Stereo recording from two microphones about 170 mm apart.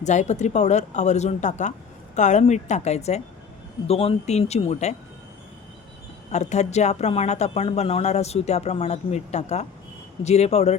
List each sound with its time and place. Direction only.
0.0 s speech: 45° left (ahead or behind)
6.3 s speech: 40° left (ahead or behind)